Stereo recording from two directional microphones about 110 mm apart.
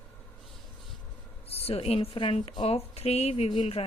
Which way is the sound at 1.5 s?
65° left (ahead or behind).